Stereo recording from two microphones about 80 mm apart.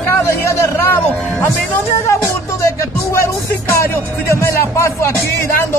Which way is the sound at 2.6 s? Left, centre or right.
Left.